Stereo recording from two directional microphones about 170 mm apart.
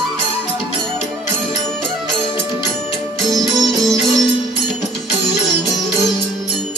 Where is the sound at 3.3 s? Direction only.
Centre (ahead or behind).